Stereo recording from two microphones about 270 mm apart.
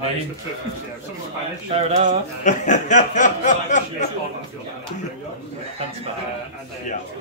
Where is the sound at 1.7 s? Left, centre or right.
Right.